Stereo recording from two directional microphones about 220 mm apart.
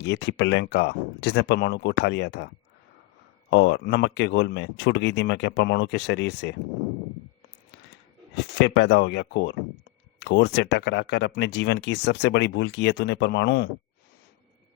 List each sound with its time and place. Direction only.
0.0 s speech: 50° left (ahead or behind)
3.5 s speech: 55° left (ahead or behind)
8.4 s speech: 55° left (ahead or behind)